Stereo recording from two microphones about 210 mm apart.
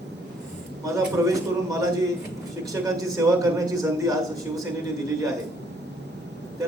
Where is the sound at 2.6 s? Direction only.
15° right (ahead or behind).